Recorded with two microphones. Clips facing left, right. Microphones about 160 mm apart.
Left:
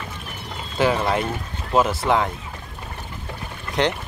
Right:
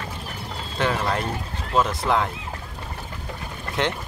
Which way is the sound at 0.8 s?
5° left (ahead or behind).